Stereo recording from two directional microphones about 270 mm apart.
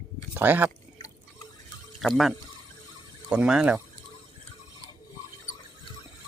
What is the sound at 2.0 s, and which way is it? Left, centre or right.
Speech, centre.